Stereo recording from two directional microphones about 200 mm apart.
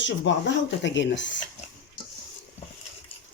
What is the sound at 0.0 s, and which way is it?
Speech, 65° left (ahead or behind).